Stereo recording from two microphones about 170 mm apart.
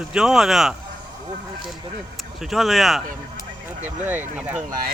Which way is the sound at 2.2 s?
Centre (ahead or behind).